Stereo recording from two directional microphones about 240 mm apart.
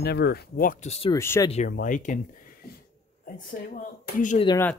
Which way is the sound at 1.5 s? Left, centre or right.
Left.